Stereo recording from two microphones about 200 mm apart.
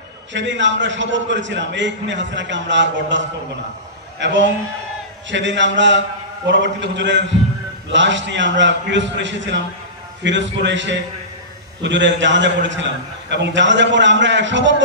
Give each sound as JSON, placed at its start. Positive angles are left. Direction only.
{"t": 0.3, "sound": "a man's voice", "side_deg": -65}